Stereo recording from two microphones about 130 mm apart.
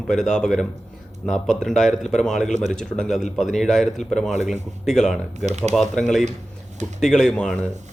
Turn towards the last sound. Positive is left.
turn(degrees=5)  # may be behind; listen again after turning